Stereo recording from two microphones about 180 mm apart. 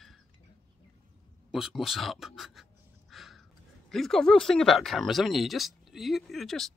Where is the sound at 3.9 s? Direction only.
Centre (ahead or behind).